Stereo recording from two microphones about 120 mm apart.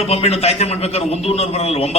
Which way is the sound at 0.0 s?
60° left (ahead or behind).